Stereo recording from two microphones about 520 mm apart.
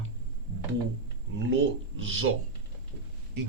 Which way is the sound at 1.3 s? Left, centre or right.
Right.